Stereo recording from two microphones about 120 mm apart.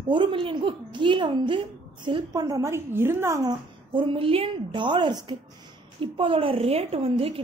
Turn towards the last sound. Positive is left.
turn(degrees=-55)  # may be behind; listen again after turning